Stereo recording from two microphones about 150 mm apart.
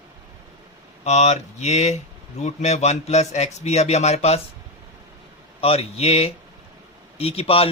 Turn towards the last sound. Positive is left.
turn(degrees=40)  # may be behind; listen again after turning